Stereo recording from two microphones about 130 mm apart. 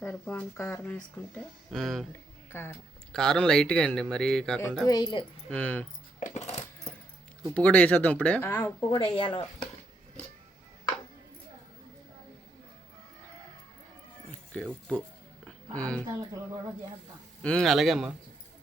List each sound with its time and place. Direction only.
0.0 s a sound: 15° left (ahead or behind)
0.5 s speech: 20° left (ahead or behind)
1.7 s speech: centre (ahead or behind)
2.5 s speech: 15° left (ahead or behind)
3.1 s speech: 5° left (ahead or behind)
4.9 s speech: 30° left (ahead or behind)
5.5 s speech: 10° left (ahead or behind)
6.1 s coin: 65° left (ahead or behind)
7.5 s speech: 10° left (ahead or behind)
8.9 s speech: 40° left (ahead or behind)
14.3 s music: 5° left (ahead or behind)
15.4 s a sound: 10° left (ahead or behind)
17.4 s speech: 5° left (ahead or behind)